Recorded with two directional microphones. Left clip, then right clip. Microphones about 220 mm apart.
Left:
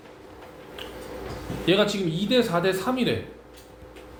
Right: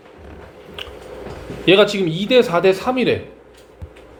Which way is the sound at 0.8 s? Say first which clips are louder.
Right 7 dB; 35° right (ahead or behind).